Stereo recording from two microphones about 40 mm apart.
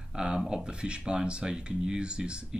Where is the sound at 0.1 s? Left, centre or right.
Right.